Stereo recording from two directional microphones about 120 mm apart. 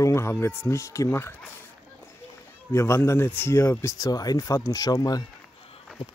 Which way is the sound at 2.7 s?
25° left (ahead or behind).